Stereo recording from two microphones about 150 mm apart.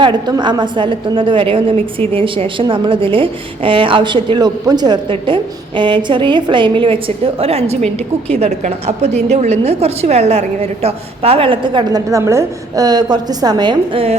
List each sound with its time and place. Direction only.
0.0 s a woman's voice: 30° right (ahead or behind)